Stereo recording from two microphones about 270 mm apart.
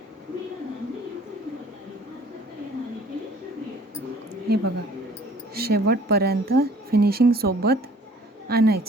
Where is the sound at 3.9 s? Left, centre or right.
Right.